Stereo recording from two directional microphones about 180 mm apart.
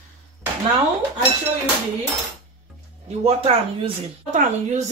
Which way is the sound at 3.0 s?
35° right (ahead or behind).